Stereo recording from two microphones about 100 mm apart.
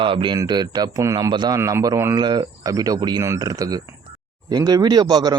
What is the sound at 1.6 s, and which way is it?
Speech, 30° right (ahead or behind).